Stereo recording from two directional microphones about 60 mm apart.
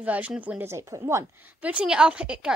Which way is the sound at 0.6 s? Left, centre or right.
Right.